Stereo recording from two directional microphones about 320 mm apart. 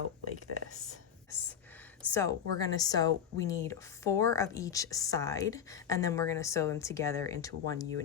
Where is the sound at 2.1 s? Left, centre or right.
Centre.